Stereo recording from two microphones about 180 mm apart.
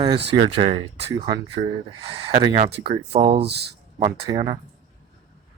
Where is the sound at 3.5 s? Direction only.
65° right (ahead or behind).